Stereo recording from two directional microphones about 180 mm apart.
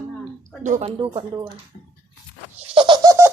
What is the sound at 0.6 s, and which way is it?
Speech, 40° right (ahead or behind).